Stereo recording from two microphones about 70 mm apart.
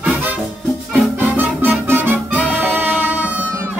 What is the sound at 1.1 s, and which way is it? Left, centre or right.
Music, right.